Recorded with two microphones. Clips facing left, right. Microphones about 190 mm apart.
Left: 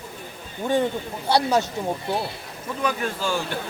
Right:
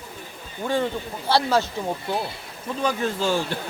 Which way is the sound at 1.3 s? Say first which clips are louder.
Even; 15° left (ahead or behind).